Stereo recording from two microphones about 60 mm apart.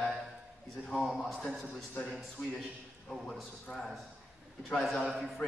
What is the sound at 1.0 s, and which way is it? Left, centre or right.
Speech, centre.